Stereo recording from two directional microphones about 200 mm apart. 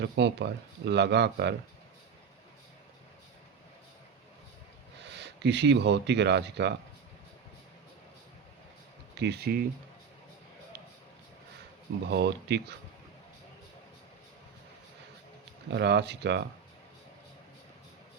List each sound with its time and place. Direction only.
0.0 s speech: 60° right (ahead or behind)
5.1 s speech: 60° right (ahead or behind)
9.1 s speech: 55° right (ahead or behind)
12.0 s speech: 55° right (ahead or behind)
15.7 s speech: 60° right (ahead or behind)